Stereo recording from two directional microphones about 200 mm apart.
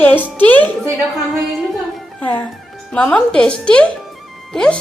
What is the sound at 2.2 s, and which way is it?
A woman's voice, 10° left (ahead or behind).